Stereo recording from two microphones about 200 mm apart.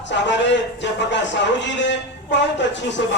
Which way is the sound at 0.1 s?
60° left (ahead or behind).